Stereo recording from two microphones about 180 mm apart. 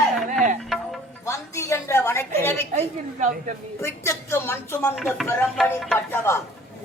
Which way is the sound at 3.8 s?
15° left (ahead or behind).